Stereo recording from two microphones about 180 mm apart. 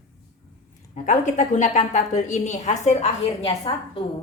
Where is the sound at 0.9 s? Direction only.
40° left (ahead or behind).